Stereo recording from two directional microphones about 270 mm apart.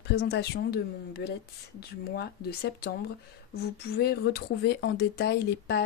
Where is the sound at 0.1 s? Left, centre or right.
Left.